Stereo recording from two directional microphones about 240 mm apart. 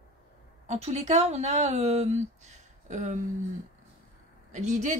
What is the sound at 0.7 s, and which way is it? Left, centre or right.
Speech, right.